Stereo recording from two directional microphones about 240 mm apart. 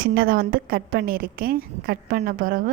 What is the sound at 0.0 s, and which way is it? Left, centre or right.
A woman's voice, right.